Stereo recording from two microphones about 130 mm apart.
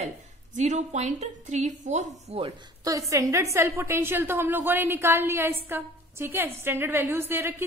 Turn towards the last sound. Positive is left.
turn(degrees=-20)  # may be behind; listen again after turning